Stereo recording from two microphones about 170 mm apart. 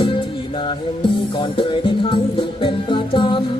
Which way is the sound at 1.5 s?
30° left (ahead or behind).